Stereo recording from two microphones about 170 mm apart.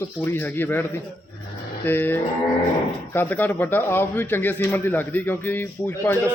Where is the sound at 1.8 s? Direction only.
10° left (ahead or behind).